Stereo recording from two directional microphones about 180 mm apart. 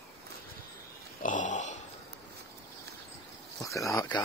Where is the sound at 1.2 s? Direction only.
45° left (ahead or behind).